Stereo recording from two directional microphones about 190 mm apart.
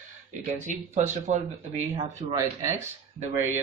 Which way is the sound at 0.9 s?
35° right (ahead or behind).